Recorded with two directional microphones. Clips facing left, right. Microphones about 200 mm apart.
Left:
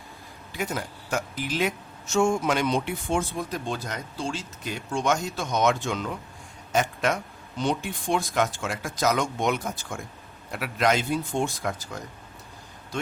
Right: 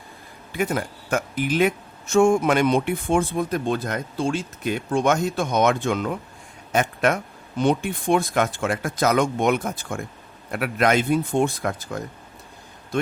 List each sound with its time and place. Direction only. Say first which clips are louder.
0.5 s speech: right 6 dB; 55° right (ahead or behind)